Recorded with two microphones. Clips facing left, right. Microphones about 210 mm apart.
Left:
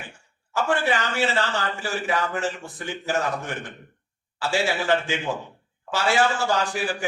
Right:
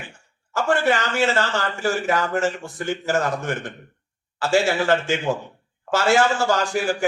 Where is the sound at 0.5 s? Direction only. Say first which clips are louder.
Right 3 dB; 45° right (ahead or behind).